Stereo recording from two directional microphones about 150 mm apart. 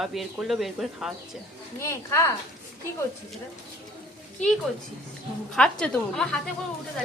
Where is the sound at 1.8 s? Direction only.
20° left (ahead or behind).